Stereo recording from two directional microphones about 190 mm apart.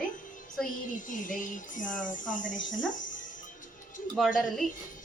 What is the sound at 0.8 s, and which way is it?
Speech, 45° left (ahead or behind).